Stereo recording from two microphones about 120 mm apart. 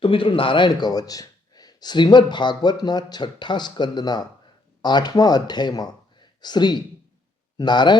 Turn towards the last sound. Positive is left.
turn(degrees=40)  # may be behind; listen again after turning